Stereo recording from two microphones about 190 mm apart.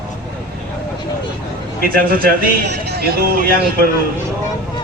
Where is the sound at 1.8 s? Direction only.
50° right (ahead or behind).